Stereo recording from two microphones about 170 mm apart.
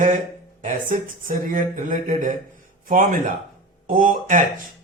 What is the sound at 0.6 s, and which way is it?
Speech, 50° right (ahead or behind).